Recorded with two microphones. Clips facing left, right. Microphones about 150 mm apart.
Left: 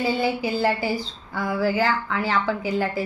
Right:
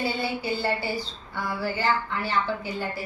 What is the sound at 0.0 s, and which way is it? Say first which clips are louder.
A woman's voice: left 5 dB; 90° left.